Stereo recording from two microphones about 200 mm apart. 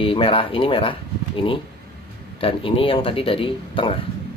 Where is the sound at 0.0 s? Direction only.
25° left (ahead or behind).